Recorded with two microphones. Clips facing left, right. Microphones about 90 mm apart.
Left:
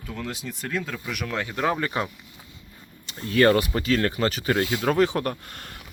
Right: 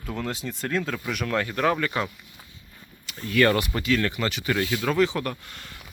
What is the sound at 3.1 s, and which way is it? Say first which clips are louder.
Speech: left 2 dB; 30° left (ahead or behind).